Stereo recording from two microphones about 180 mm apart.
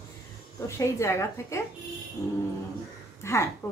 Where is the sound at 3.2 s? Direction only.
15° left (ahead or behind).